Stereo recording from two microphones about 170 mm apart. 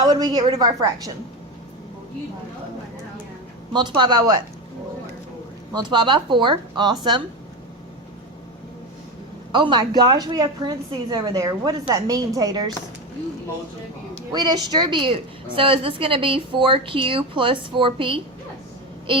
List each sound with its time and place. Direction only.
0.2 s a woman's voice: 25° right (ahead or behind)
3.7 s a woman's voice: 25° right (ahead or behind)
5.7 s a woman's voice: 30° right (ahead or behind)
9.5 s a woman's voice: 25° right (ahead or behind)
14.3 s a woman's voice: 25° right (ahead or behind)